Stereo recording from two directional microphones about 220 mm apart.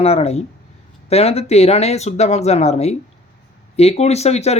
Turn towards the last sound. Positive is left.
turn(degrees=30)  # may be behind; listen again after turning